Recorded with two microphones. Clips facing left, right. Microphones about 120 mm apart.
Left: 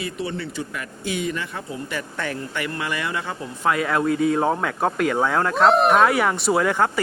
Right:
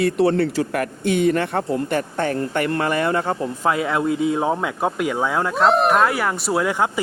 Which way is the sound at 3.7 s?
25° right (ahead or behind).